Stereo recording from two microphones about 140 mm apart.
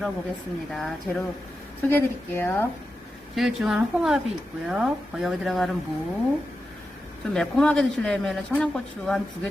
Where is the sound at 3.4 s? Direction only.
5° right (ahead or behind).